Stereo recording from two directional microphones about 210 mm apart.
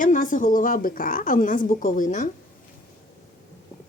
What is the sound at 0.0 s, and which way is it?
A woman's voice, 40° left (ahead or behind).